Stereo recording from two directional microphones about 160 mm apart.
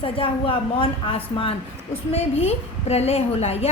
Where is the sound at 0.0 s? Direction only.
35° left (ahead or behind).